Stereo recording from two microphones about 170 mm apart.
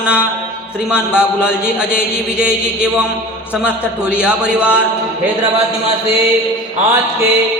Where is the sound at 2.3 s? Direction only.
5° right (ahead or behind).